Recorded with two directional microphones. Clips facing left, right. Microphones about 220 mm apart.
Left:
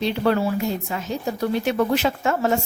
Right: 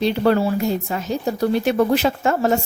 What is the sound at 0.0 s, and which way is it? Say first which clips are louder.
Speech: right 3 dB; 40° right (ahead or behind).